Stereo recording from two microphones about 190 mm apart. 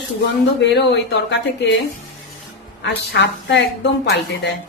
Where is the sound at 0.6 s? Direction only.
65° left (ahead or behind).